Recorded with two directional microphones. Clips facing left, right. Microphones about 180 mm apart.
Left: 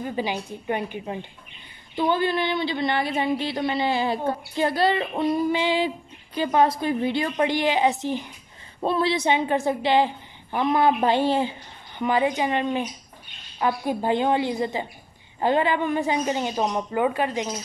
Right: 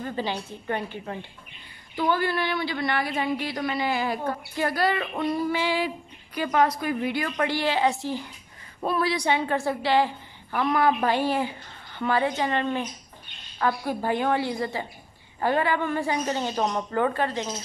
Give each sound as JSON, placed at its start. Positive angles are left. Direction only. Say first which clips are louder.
{"t": 0.0, "sound": "a woman's voice", "louder": "left 2 dB", "side_deg": 15}